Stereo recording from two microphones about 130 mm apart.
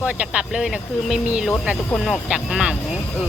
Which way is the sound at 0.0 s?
10° right (ahead or behind).